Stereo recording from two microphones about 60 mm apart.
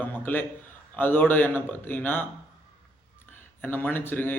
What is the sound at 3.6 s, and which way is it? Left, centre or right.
Speech, left.